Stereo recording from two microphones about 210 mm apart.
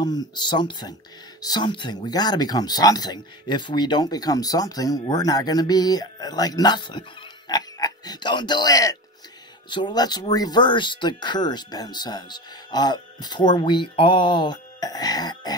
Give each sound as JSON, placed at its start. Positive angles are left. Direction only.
{"t": 0.0, "sound": "speech", "side_deg": 20}